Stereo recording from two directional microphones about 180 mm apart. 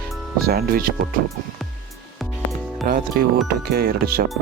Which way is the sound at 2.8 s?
55° right (ahead or behind).